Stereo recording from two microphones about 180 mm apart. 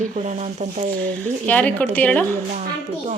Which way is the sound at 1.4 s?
10° left (ahead or behind).